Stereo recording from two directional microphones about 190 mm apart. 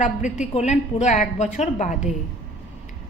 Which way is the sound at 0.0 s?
40° left (ahead or behind).